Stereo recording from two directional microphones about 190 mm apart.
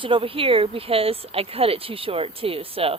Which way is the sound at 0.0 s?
30° right (ahead or behind).